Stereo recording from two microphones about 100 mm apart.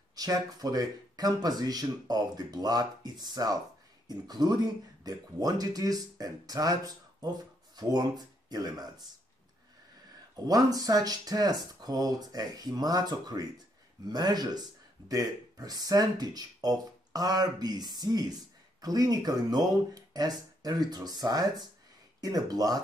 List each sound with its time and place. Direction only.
0.1 s speech: 40° right (ahead or behind)
10.4 s speech: 40° right (ahead or behind)